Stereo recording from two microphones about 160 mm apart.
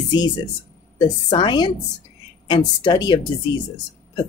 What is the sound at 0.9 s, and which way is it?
Speech, 30° left (ahead or behind).